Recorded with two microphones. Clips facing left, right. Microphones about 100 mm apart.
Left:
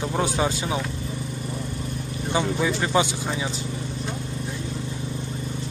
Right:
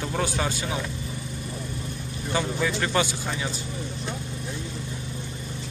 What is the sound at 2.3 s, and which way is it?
Speech, 15° left (ahead or behind).